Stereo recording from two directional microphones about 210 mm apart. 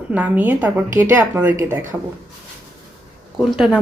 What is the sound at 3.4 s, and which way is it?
Speech, 5° right (ahead or behind).